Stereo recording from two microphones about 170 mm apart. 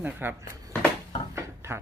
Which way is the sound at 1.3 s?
15° right (ahead or behind).